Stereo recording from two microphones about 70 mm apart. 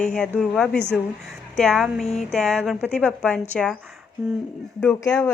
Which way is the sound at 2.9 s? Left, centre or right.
Centre.